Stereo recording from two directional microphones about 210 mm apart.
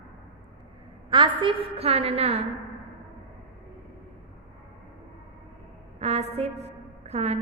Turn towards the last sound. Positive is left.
turn(degrees=-30)  # may be behind; listen again after turning